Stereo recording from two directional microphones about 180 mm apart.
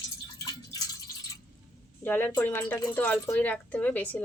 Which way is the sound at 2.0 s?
10° left (ahead or behind).